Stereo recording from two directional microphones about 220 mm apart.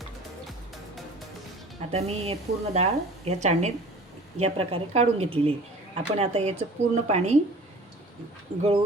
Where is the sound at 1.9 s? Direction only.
30° right (ahead or behind).